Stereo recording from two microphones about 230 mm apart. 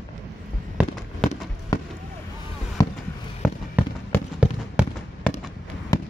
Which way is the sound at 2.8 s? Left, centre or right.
Centre.